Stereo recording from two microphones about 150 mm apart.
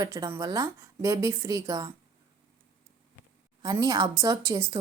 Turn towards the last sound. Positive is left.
turn(degrees=-20)  # may be behind; listen again after turning